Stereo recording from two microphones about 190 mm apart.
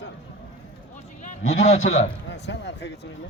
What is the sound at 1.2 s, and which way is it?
Speech, 35° left (ahead or behind).